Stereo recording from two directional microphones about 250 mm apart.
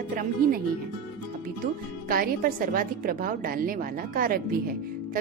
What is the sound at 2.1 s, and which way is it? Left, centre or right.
A woman's voice, right.